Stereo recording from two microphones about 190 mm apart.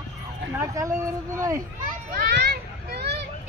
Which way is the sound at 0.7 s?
15° right (ahead or behind).